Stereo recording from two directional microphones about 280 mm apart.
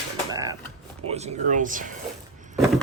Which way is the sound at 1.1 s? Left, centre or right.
Right.